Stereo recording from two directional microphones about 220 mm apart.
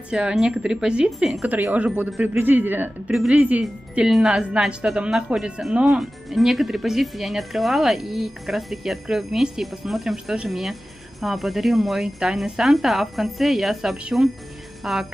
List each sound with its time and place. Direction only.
0.1 s speech: 5° right (ahead or behind)